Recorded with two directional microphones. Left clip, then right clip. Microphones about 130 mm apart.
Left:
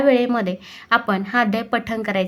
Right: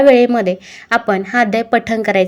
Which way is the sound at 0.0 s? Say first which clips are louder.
Right 8 dB; 30° right (ahead or behind).